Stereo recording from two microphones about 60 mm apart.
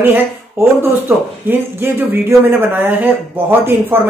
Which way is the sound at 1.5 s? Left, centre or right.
Right.